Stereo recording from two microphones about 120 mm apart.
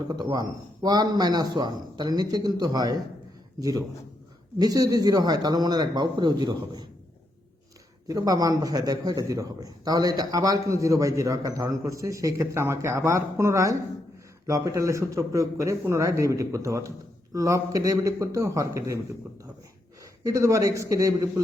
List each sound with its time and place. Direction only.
0.2 s a man's voice: 35° right (ahead or behind)
8.0 s a man's voice: 30° right (ahead or behind)
20.2 s a man's voice: 30° right (ahead or behind)